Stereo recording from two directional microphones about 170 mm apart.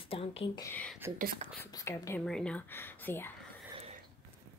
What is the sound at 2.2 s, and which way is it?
Speech, 5° left (ahead or behind).